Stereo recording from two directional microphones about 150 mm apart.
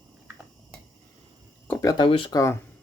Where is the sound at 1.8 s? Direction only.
25° left (ahead or behind).